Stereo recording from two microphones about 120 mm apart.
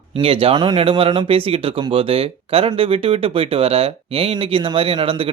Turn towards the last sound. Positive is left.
turn(degrees=-50)  # may be behind; listen again after turning